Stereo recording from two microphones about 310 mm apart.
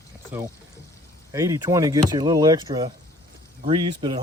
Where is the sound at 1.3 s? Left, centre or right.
Centre.